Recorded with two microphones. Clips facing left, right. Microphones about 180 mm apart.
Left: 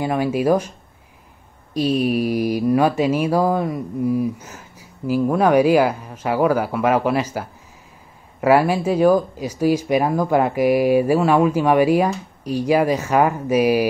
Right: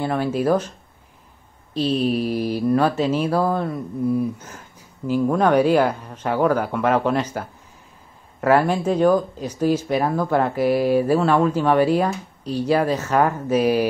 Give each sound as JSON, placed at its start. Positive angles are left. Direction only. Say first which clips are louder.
{"t": 0.0, "sound": "mantra", "louder": "left 2 dB", "side_deg": 10}